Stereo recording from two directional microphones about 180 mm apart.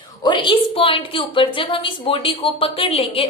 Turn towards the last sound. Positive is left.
turn(degrees=30)  # may be behind; listen again after turning